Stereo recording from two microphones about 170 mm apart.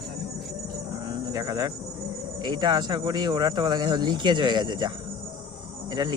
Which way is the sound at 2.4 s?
25° right (ahead or behind).